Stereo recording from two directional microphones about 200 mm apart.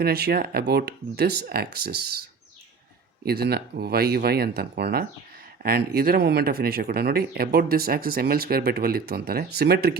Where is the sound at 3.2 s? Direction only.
50° right (ahead or behind).